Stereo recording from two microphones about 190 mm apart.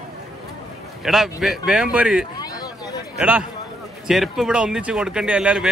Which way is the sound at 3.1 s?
5° right (ahead or behind).